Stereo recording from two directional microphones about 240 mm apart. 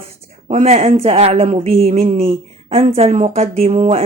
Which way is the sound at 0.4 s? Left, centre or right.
Right.